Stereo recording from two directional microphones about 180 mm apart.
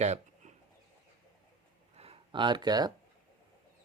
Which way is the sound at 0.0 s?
40° right (ahead or behind).